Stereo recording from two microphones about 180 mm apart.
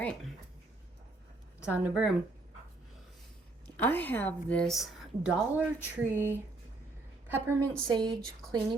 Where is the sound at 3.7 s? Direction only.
10° left (ahead or behind); by 6.4 s 10° right (ahead or behind).